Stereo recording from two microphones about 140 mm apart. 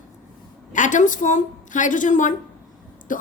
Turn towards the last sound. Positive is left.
turn(degrees=70)  # may be behind; listen again after turning